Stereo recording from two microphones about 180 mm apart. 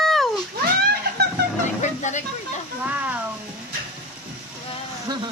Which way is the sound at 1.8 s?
40° left (ahead or behind).